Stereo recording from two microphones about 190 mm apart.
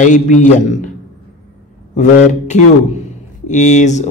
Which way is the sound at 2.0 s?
40° left (ahead or behind).